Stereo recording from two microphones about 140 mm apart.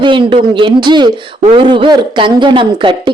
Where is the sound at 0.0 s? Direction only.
35° right (ahead or behind).